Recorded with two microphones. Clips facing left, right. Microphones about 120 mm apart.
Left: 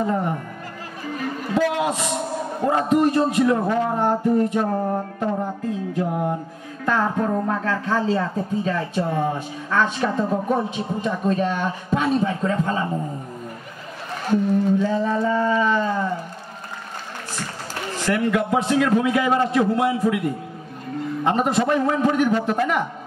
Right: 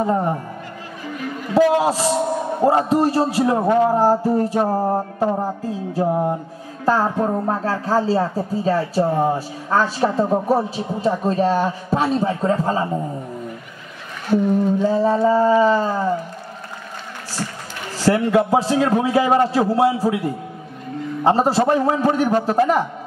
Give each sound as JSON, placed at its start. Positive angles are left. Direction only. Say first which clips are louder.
{"t": 0.0, "sound": "speech", "louder": "right 3 dB", "side_deg": -35}
{"t": 1.5, "sound": "speech", "louder": "right 6 dB", "side_deg": -35}
{"t": 14.3, "sound": "speech", "louder": "right 2 dB", "side_deg": -35}
{"t": 17.9, "sound": "speech", "louder": "right 5 dB", "side_deg": -30}